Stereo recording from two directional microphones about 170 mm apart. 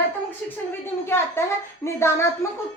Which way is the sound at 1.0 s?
15° left (ahead or behind).